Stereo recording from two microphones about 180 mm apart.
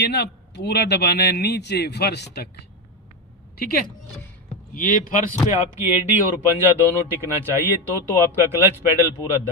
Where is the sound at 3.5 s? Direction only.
60° left (ahead or behind).